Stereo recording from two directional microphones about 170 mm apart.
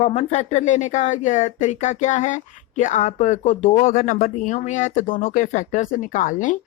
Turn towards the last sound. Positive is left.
turn(degrees=50)  # may be behind; listen again after turning